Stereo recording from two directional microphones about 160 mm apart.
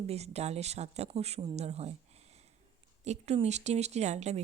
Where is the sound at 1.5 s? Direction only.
40° right (ahead or behind).